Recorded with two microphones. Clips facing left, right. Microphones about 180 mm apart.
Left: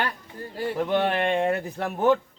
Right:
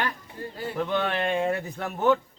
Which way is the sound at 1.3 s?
55° left (ahead or behind).